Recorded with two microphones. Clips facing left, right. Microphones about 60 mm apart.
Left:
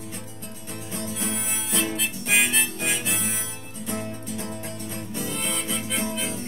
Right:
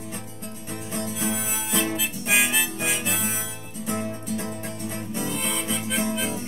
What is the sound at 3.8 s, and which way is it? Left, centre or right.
Music, right.